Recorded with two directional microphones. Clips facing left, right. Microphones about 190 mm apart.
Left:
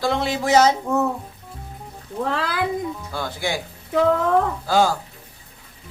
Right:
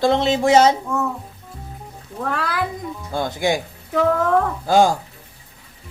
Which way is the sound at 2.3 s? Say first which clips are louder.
Right 1 dB; 25° left (ahead or behind).